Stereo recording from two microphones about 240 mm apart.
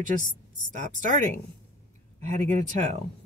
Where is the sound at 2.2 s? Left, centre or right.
Right.